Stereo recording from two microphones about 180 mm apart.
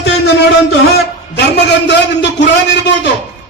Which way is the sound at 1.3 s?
70° left (ahead or behind).